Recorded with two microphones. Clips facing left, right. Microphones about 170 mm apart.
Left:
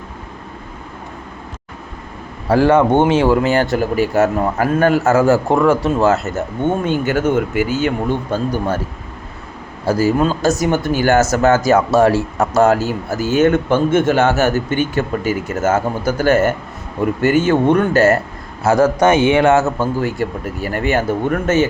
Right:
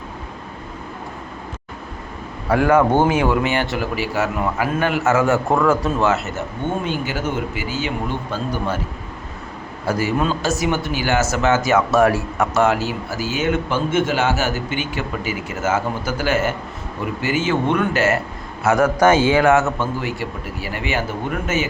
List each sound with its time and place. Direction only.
2.5 s a man's voice: 30° left (ahead or behind)
6.8 s speech: 50° left (ahead or behind)
9.8 s a man's voice: 35° left (ahead or behind)
20.1 s speech: 50° left (ahead or behind)